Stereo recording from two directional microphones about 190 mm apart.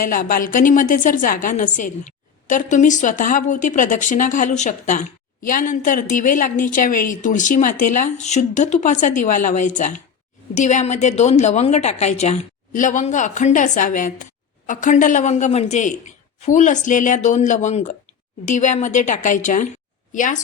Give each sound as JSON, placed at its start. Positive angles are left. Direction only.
{"t": 0.0, "sound": "a woman's voice", "side_deg": 45}